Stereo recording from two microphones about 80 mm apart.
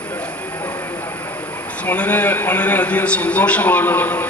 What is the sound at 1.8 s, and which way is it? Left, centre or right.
A man's voice, centre.